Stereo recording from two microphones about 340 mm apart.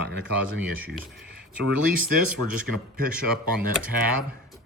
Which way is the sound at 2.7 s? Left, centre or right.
Right.